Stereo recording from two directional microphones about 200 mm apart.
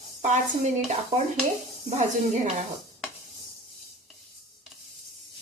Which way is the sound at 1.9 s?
35° right (ahead or behind).